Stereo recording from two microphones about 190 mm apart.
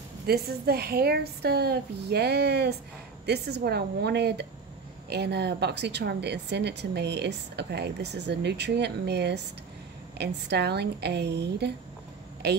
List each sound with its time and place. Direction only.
0.3 s a woman's voice: 55° right (ahead or behind)